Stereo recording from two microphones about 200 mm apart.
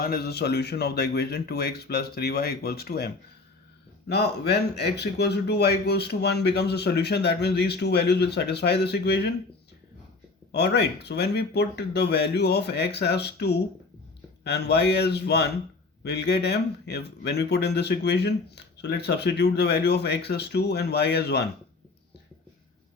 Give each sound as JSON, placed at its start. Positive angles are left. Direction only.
{"t": 0.0, "sound": "speech", "side_deg": 50}
{"t": 4.1, "sound": "a man's voice", "side_deg": 55}
{"t": 10.5, "sound": "a man's voice", "side_deg": 55}